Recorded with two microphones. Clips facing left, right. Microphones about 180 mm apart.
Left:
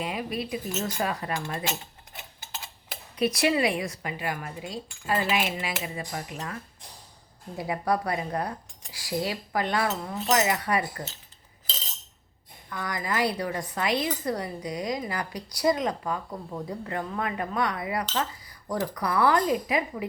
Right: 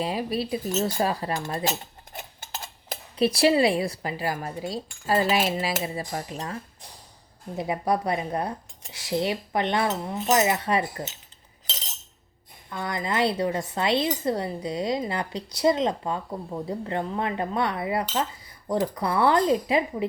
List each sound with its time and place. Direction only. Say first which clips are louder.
0.0 s speech: right 4 dB; 30° right (ahead or behind)
2.1 s a sound: right 4 dB; 40° right (ahead or behind)
3.2 s speech: right 4 dB; 30° right (ahead or behind)
12.7 s speech: right 2 dB; 25° right (ahead or behind)
18.0 s cutlery: right 2 dB; 15° right (ahead or behind)
18.7 s speech: right 3 dB; 25° right (ahead or behind)